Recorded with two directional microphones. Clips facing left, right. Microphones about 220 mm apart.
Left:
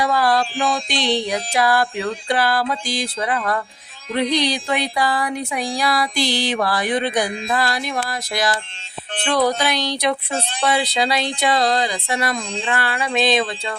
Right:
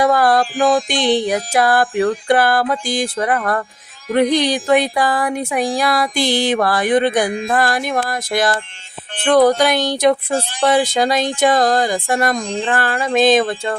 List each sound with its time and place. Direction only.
0.0 s speech: 50° right (ahead or behind)